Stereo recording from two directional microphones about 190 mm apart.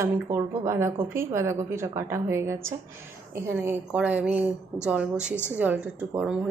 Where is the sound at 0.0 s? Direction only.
15° right (ahead or behind).